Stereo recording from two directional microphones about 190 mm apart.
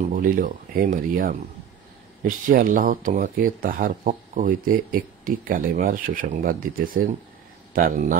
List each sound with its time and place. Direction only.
0.1 s speech: 45° right (ahead or behind)